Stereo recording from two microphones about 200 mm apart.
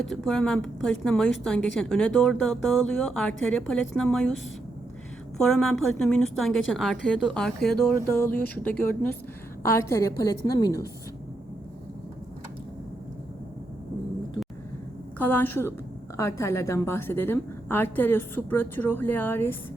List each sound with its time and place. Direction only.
0.0 s a woman's voice: centre (ahead or behind)
5.4 s a woman's voice: centre (ahead or behind); by 10.8 s 20° left (ahead or behind)
15.2 s a woman's voice: 10° left (ahead or behind)